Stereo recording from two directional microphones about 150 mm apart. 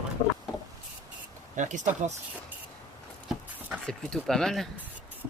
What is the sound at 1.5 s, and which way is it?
Speech, 55° right (ahead or behind).